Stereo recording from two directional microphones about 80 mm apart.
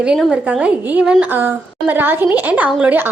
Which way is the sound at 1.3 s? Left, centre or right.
Right.